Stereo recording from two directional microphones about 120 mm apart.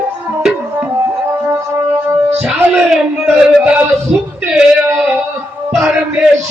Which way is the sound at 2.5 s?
5° right (ahead or behind).